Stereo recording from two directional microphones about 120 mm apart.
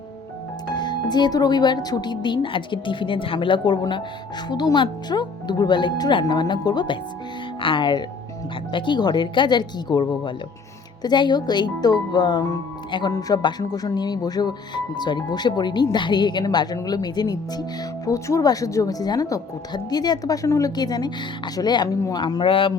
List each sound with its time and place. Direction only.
0.7 s speech: 40° left (ahead or behind)